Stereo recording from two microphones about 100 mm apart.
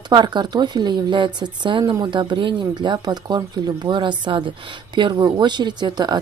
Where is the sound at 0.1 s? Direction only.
50° right (ahead or behind).